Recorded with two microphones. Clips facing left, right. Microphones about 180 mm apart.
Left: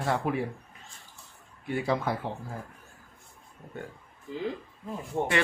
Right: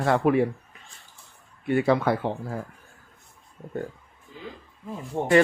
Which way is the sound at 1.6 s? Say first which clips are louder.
Right 7 dB; 70° right (ahead or behind).